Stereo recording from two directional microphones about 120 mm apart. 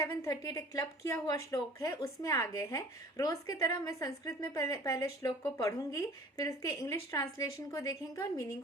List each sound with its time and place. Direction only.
0.2 s speech: 30° left (ahead or behind)